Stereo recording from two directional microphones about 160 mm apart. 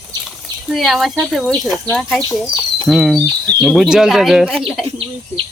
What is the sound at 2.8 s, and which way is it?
Speech, centre (ahead or behind).